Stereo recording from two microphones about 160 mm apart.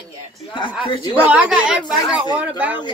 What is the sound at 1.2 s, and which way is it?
Speech, 10° right (ahead or behind).